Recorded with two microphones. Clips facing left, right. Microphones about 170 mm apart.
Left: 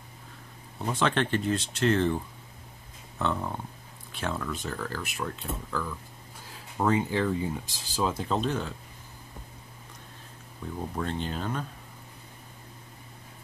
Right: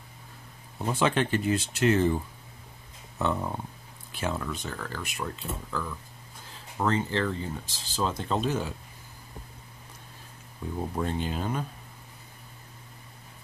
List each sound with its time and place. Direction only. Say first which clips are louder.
0.7 s speech: right 1 dB; 5° right (ahead or behind)
6.8 s speech: left 1 dB; 10° left (ahead or behind); by 8.7 s 5° right (ahead or behind)
10.8 s speech: right 2 dB; 10° right (ahead or behind)